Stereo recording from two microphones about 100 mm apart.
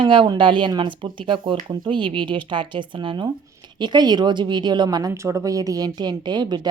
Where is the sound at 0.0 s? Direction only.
55° right (ahead or behind).